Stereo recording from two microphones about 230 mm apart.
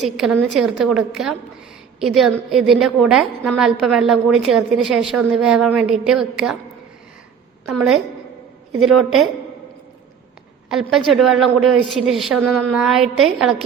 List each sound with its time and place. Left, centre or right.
0.0 s a woman's voice: centre
7.7 s a woman's voice: centre
10.7 s a woman's voice: centre